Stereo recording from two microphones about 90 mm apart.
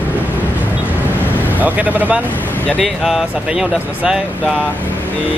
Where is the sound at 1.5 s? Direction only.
20° right (ahead or behind).